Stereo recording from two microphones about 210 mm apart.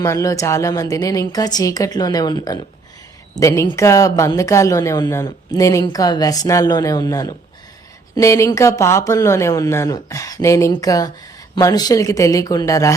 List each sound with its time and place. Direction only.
0.0 s a woman's voice: 15° left (ahead or behind)